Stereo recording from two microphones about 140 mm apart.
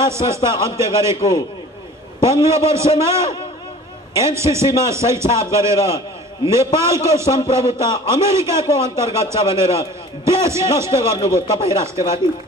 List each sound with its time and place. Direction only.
0.1 s a man's voice: 20° right (ahead or behind)
2.1 s a man's voice: 20° right (ahead or behind)